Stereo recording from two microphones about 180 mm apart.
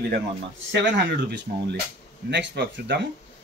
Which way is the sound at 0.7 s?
75° right (ahead or behind).